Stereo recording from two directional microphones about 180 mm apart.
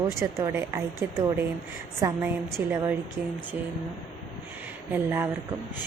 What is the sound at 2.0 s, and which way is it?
A woman's voice, 15° right (ahead or behind).